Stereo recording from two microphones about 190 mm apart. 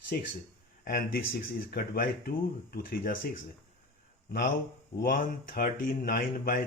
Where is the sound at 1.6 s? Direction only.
50° left (ahead or behind).